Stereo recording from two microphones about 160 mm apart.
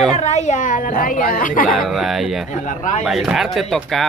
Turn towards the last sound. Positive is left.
turn(degrees=0)  # may be behind; listen again after turning